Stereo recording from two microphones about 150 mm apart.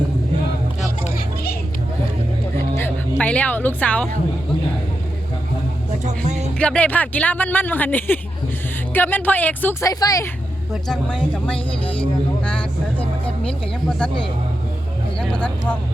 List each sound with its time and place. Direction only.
2.7 s speech: 15° left (ahead or behind)
6.1 s speech: 50° right (ahead or behind)
6.6 s speech: 10° left (ahead or behind)
9.9 s speech: 25° left (ahead or behind)
10.8 s speech: 5° left (ahead or behind)
12.5 s vehicle: 10° left (ahead or behind)
15.2 s speech: 5° left (ahead or behind)